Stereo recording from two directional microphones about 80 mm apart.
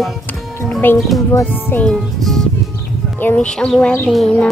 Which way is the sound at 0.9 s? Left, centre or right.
Centre.